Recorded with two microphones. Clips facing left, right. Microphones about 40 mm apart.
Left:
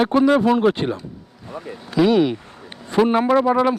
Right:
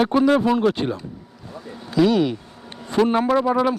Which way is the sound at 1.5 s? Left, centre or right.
Left.